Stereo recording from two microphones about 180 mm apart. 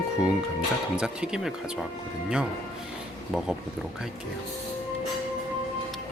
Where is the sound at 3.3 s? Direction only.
Centre (ahead or behind).